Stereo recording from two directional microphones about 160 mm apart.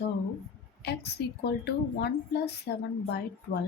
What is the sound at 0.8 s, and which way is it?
A woman's voice, 90° left.